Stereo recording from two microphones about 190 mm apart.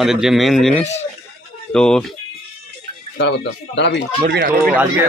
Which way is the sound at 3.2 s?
65° left (ahead or behind).